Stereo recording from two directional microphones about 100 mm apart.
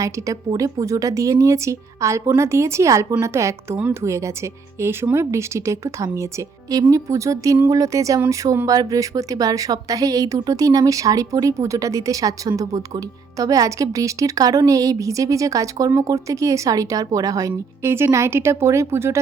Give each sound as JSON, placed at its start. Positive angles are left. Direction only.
{"t": 0.0, "sound": "a woman's voice", "side_deg": -35}